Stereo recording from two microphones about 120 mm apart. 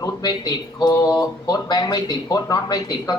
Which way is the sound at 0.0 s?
35° left (ahead or behind).